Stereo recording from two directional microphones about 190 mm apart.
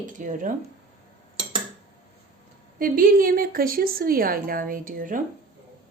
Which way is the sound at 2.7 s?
50° right (ahead or behind).